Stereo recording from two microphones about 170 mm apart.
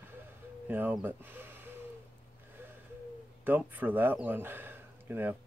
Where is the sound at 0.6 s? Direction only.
10° right (ahead or behind).